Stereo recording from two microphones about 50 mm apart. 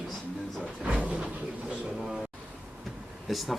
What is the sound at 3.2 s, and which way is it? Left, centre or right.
Speech, centre.